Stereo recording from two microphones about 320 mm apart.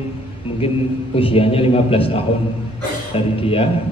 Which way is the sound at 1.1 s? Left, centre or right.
Centre.